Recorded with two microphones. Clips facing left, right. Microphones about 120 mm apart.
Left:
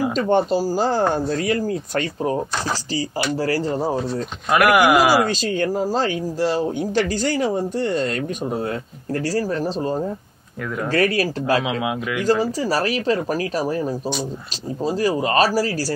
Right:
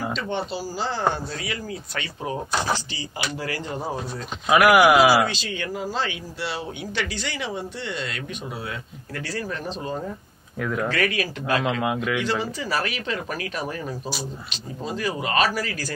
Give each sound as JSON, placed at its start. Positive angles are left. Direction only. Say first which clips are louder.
{"t": 0.1, "sound": "speech", "louder": "left 10 dB", "side_deg": 45}
{"t": 4.5, "sound": "speech", "louder": "even", "side_deg": 0}
{"t": 5.1, "sound": "speech", "louder": "left 3 dB", "side_deg": 45}
{"t": 10.6, "sound": "speech", "louder": "right 1 dB", "side_deg": 0}
{"t": 10.9, "sound": "speech", "louder": "left 6 dB", "side_deg": 35}
{"t": 11.8, "sound": "speech", "louder": "even", "side_deg": 0}
{"t": 12.2, "sound": "speech", "louder": "left 7 dB", "side_deg": 40}